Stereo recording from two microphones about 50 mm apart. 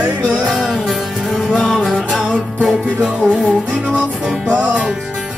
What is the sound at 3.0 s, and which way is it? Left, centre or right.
Music, right.